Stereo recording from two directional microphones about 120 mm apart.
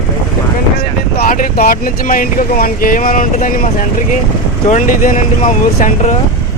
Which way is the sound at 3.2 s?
90° left.